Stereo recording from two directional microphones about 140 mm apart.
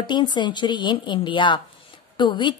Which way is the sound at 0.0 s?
35° left (ahead or behind).